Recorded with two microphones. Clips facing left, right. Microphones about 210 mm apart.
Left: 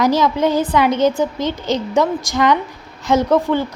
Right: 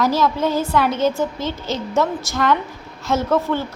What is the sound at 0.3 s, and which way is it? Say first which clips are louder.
A woman's voice: left 3 dB; 15° left (ahead or behind).